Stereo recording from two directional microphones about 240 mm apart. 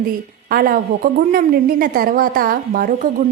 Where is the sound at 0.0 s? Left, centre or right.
Right.